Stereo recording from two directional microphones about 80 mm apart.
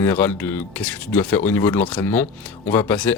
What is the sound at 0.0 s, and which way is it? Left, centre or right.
Speech, left.